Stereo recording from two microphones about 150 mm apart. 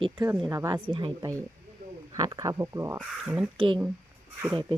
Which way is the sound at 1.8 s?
80° right.